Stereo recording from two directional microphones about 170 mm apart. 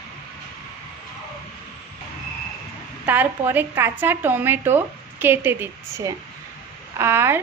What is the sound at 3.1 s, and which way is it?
Speech, 10° right (ahead or behind).